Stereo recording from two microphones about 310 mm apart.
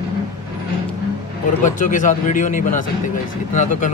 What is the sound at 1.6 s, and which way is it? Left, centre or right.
Speech, left.